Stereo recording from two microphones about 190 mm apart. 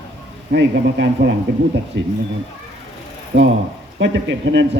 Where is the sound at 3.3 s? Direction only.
70° right (ahead or behind).